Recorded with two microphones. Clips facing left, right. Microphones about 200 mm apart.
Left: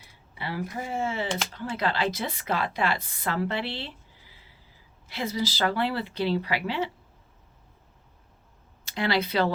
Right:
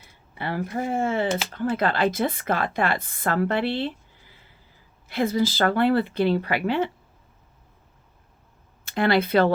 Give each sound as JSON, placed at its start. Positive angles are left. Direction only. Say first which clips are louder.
{"t": 0.3, "sound": "a woman's voice", "louder": "right 5 dB", "side_deg": -50}
{"t": 8.8, "sound": "speech", "louder": "right 5 dB", "side_deg": -55}